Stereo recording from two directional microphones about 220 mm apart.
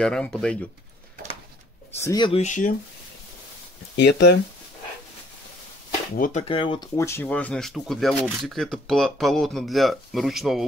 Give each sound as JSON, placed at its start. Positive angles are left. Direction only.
{"t": 0.0, "sound": "speech", "side_deg": 5}
{"t": 2.0, "sound": "speech", "side_deg": 15}
{"t": 2.4, "sound": "speech", "side_deg": 35}
{"t": 3.9, "sound": "speech", "side_deg": 50}
{"t": 6.1, "sound": "speech", "side_deg": 40}
{"t": 6.4, "sound": "speech", "side_deg": 25}